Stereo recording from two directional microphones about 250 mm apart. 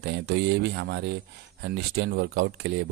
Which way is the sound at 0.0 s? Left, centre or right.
Right.